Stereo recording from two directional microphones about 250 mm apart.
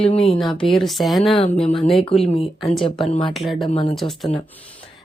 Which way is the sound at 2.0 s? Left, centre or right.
Left.